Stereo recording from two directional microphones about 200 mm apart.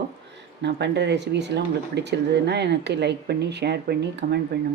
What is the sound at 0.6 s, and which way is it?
Speech, 60° right (ahead or behind).